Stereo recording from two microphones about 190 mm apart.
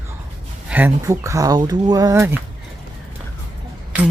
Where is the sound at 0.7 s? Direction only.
10° right (ahead or behind).